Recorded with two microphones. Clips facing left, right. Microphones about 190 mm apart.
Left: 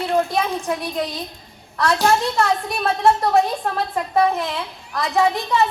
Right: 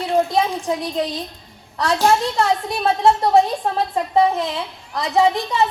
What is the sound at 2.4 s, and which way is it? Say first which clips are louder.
A woman's voice: right 1 dB; 25° right (ahead or behind).